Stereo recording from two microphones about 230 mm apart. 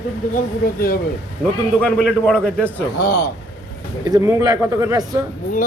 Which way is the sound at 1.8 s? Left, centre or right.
Centre.